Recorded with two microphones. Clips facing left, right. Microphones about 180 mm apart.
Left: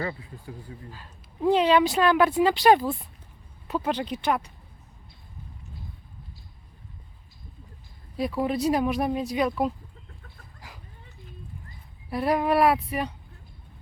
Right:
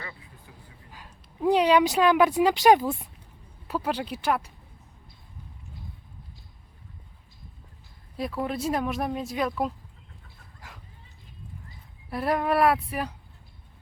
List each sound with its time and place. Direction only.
0.9 s speech: 15° right (ahead or behind)
8.1 s speech: centre (ahead or behind)
12.1 s speech: centre (ahead or behind)